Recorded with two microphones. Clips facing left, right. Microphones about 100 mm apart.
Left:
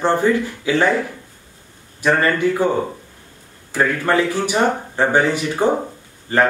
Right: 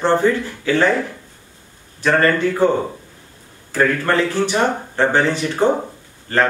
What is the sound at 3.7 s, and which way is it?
Speech, 10° left (ahead or behind).